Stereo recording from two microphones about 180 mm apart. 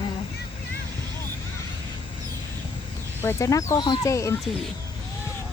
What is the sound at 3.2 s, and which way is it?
Speech, 15° left (ahead or behind).